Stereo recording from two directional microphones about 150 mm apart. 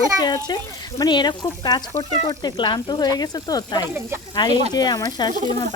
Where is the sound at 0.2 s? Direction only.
25° left (ahead or behind).